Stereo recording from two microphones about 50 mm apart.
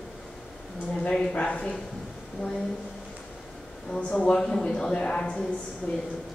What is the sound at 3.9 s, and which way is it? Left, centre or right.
A woman's voice, left.